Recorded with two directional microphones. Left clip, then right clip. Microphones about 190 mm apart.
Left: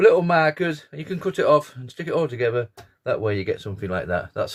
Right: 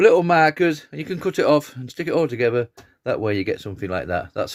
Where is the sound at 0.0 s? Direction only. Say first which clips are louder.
Right 2 dB; 45° right (ahead or behind).